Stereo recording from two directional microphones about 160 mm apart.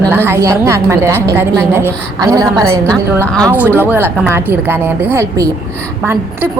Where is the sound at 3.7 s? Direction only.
15° right (ahead or behind).